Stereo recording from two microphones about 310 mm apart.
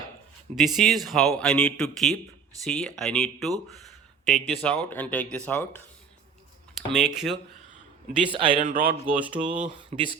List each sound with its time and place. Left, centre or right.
0.5 s speech: centre
8.3 s a man's voice: centre
8.8 s speech: centre
9.6 s a man's voice: centre